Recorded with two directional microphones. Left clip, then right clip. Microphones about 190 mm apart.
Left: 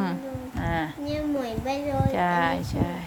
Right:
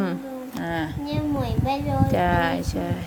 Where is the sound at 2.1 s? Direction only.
5° right (ahead or behind).